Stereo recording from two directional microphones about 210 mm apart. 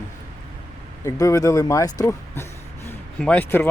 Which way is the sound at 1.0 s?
15° left (ahead or behind).